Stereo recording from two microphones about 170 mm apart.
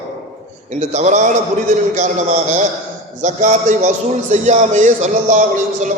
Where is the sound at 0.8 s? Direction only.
40° right (ahead or behind).